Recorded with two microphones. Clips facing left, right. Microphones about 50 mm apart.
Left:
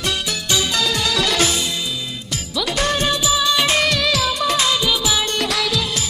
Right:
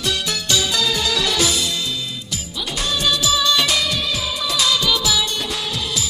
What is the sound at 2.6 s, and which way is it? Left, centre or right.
Music, left.